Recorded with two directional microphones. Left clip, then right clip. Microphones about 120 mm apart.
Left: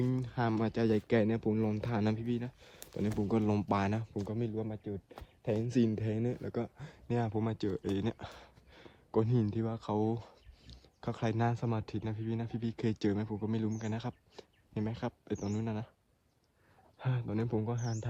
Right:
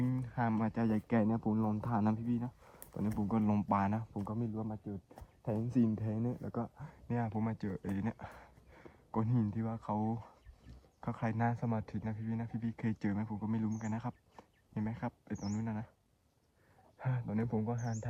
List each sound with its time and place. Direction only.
0.0 s a sound: 40° left (ahead or behind)
0.5 s speech: 60° left (ahead or behind)
3.2 s speech: 50° left (ahead or behind); by 4.8 s 75° left (ahead or behind)
5.8 s speech: 65° left (ahead or behind); by 6.8 s 90° left
6.8 s speech: 40° left (ahead or behind)
17.0 s speech: 35° left (ahead or behind)
17.3 s speech: 15° left (ahead or behind)